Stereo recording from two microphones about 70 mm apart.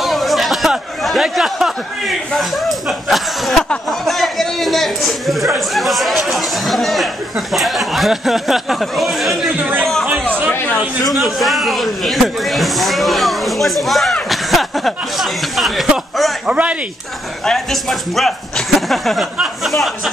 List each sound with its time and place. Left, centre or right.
0.0 s a man's voice: centre
11.1 s a man's voice: centre
16.4 s speech: centre
17.5 s a man's voice: centre